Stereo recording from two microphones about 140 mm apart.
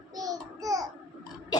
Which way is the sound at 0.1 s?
25° right (ahead or behind).